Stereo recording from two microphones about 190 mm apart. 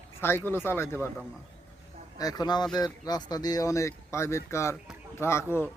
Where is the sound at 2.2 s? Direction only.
20° left (ahead or behind).